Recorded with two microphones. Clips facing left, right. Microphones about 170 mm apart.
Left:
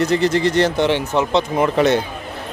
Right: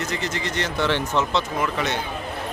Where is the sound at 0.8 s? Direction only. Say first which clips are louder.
Left 5 dB; 15° left (ahead or behind).